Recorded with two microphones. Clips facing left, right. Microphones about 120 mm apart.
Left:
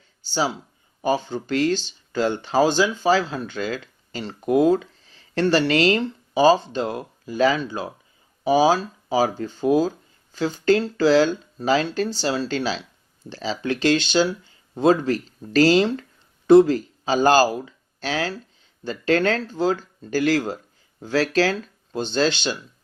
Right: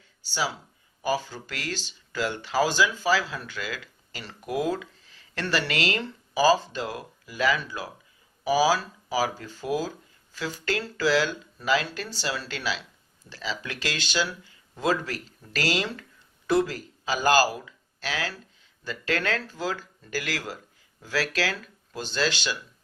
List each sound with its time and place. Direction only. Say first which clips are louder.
0.3 s speech: left 6 dB; 25° left (ahead or behind)